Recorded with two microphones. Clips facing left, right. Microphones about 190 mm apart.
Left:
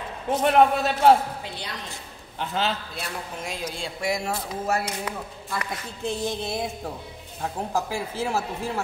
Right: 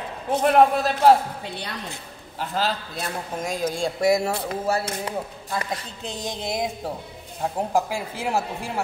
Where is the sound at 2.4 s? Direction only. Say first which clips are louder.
Right 1 dB; centre (ahead or behind).